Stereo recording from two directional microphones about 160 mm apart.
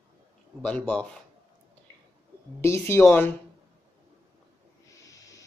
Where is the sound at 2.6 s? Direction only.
15° left (ahead or behind).